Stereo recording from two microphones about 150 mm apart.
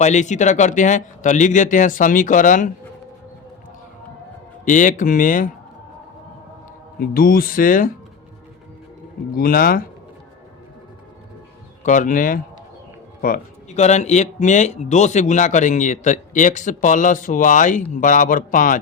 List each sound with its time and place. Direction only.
0.0 s speech: 50° left (ahead or behind)
4.6 s speech: 55° left (ahead or behind)
7.0 s speech: 75° left (ahead or behind)
9.3 s speech: 70° left (ahead or behind)
11.8 s speech: 55° left (ahead or behind)
13.7 s speech: 50° left (ahead or behind)